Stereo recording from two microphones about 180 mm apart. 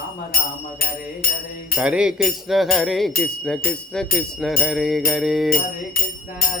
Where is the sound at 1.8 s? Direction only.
5° right (ahead or behind).